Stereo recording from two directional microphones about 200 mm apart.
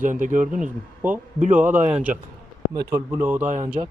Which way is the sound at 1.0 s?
10° right (ahead or behind).